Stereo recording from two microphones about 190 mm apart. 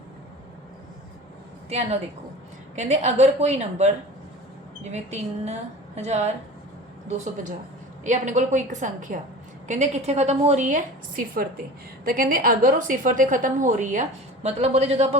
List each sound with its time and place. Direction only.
2.7 s a woman's voice: 35° right (ahead or behind)
8.0 s a woman's voice: 40° right (ahead or behind)